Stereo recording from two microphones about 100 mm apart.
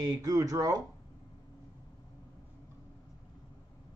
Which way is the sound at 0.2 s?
35° right (ahead or behind).